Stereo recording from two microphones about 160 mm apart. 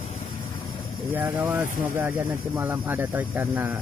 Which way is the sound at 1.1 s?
15° right (ahead or behind).